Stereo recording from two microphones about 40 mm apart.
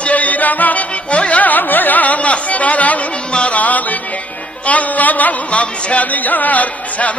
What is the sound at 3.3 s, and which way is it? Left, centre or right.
Music, left.